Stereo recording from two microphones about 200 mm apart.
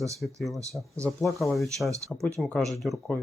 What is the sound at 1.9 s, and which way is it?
Speech, 15° right (ahead or behind).